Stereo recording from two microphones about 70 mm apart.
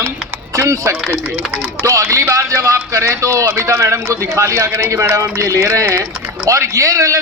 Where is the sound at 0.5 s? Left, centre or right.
Right.